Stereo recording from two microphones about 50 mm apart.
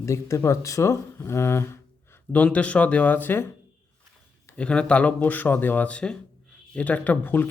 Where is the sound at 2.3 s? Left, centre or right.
Left.